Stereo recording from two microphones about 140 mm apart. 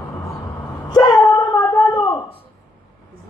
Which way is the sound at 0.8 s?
30° left (ahead or behind).